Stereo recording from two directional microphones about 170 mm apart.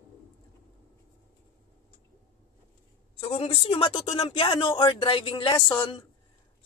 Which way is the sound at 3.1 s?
30° left (ahead or behind).